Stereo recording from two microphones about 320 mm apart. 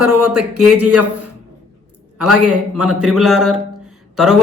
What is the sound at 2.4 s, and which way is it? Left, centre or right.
Speech, right.